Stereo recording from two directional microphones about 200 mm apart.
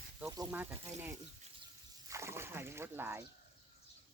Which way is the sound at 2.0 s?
15° right (ahead or behind).